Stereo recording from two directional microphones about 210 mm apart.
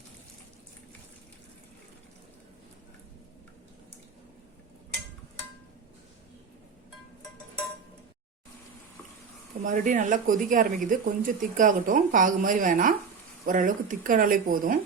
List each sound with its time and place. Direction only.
9.6 s speech: 35° right (ahead or behind)